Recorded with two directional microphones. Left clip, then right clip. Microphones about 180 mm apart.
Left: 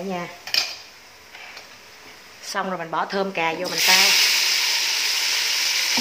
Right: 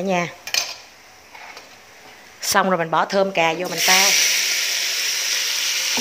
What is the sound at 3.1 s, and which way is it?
Speech, 25° right (ahead or behind).